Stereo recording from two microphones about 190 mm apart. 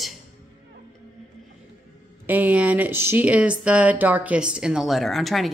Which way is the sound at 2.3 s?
10° right (ahead or behind).